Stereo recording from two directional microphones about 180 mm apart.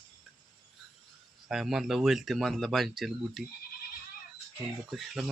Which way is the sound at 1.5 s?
Centre (ahead or behind).